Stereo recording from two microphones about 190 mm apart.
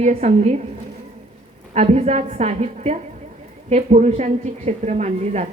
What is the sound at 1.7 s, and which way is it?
A woman's voice, 35° right (ahead or behind).